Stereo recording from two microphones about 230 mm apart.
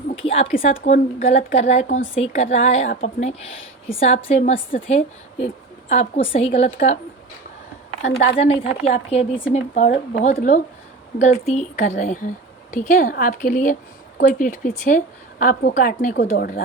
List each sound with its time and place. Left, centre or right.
0.2 s a sound: left
0.5 s a woman's voice: left
8.4 s a woman's voice: left